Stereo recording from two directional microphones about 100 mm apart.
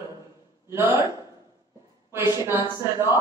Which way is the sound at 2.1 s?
25° right (ahead or behind).